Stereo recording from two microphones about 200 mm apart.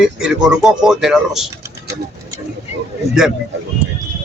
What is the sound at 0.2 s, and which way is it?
Speech, 5° right (ahead or behind).